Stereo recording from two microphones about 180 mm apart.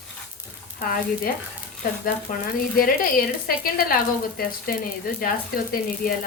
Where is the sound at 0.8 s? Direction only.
55° left (ahead or behind).